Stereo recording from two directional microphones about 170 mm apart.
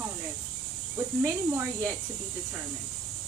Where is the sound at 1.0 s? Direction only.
15° right (ahead or behind).